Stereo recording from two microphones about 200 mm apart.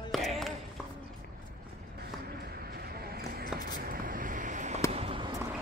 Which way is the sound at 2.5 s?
50° right (ahead or behind).